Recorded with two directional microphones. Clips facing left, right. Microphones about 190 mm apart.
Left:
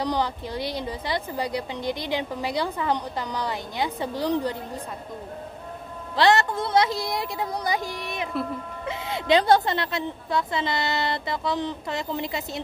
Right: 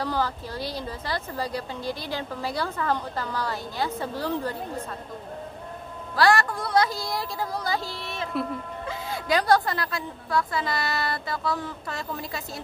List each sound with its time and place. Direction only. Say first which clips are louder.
0.0 s a woman's voice: left 2 dB; 15° left (ahead or behind)
6.1 s a woman's voice: left 1 dB; 20° left (ahead or behind)